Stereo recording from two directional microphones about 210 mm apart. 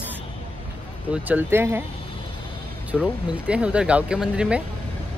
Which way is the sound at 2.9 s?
5° right (ahead or behind).